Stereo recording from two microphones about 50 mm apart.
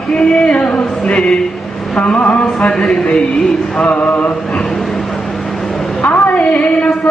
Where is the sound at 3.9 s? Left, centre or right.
Left.